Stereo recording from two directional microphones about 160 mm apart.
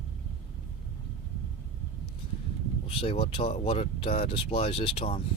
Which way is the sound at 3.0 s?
35° left (ahead or behind).